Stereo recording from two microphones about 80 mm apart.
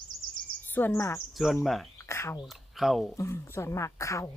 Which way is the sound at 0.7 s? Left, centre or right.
Left.